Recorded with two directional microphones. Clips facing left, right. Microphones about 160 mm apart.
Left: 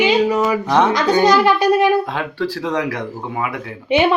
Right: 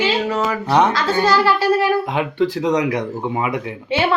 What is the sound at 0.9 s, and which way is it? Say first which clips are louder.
A woman's voice: left 3 dB; 20° left (ahead or behind).